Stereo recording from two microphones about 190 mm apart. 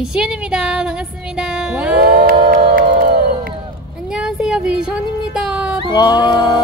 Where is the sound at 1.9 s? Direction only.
50° right (ahead or behind).